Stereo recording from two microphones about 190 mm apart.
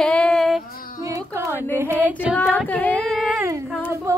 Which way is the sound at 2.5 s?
5° left (ahead or behind).